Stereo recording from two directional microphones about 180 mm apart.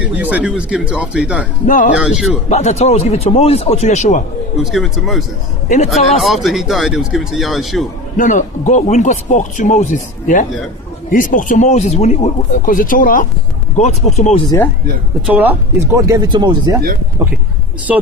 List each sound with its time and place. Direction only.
0.0 s speech: 10° right (ahead or behind)
1.6 s a man's voice: 45° left (ahead or behind)
2.0 s speech: 5° right (ahead or behind)
2.5 s speech: 40° left (ahead or behind)
4.6 s speech: centre (ahead or behind)
5.6 s a man's voice: 40° left (ahead or behind)
6.1 s speech: centre (ahead or behind)
8.1 s a man's voice: 45° left (ahead or behind)
13.7 s speech: 40° left (ahead or behind)
15.3 s speech: 10° right (ahead or behind)